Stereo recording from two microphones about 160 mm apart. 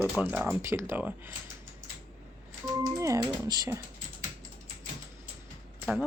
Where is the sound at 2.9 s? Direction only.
20° right (ahead or behind).